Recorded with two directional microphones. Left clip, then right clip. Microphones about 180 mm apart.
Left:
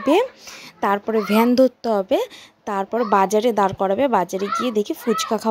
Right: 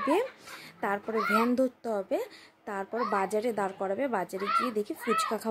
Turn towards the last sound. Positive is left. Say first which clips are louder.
# left 7 dB
turn(degrees=35)  # may be behind; listen again after turning